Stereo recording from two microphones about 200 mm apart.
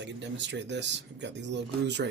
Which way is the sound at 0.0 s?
60° right (ahead or behind).